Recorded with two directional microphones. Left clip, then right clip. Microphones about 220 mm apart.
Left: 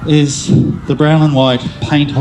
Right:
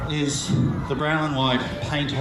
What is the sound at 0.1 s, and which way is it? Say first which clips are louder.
A man's voice: left 14 dB; 50° left (ahead or behind).